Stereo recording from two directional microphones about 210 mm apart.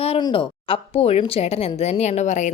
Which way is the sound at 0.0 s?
25° left (ahead or behind).